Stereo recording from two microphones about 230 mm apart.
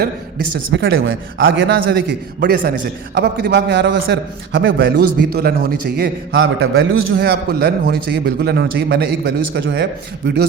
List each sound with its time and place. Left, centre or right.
0.7 s a man's voice: right